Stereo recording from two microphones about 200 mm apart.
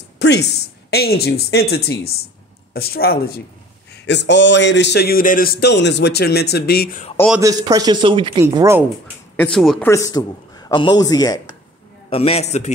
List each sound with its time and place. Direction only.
0.2 s speech: 55° left (ahead or behind)
3.9 s a man's voice: 60° left (ahead or behind)
7.3 s speech: 15° right (ahead or behind)
8.5 s speech: 10° right (ahead or behind)
9.4 s speech: centre (ahead or behind)
9.8 s speech: 15° left (ahead or behind)
12.1 s a man's voice: 30° left (ahead or behind)